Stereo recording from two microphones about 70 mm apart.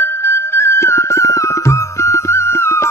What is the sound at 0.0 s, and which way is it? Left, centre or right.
Music, left.